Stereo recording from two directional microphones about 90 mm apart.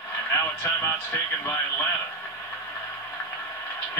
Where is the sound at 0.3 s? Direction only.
30° left (ahead or behind).